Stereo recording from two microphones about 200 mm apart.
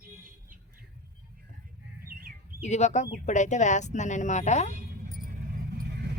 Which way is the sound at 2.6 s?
35° left (ahead or behind).